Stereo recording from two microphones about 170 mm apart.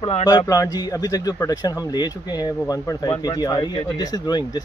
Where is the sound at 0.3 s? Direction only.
20° left (ahead or behind).